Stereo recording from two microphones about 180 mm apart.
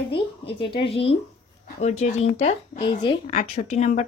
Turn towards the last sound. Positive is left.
turn(degrees=40)  # may be behind; listen again after turning